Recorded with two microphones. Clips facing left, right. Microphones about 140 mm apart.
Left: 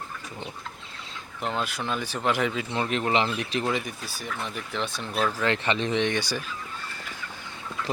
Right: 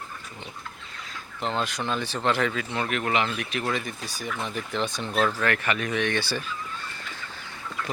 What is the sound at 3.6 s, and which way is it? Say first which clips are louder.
Speech: even; 15° left (ahead or behind).